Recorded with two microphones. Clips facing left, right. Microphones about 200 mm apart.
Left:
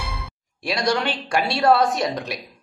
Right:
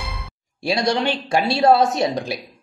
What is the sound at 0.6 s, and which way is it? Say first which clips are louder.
Speech: right 2 dB; 25° right (ahead or behind).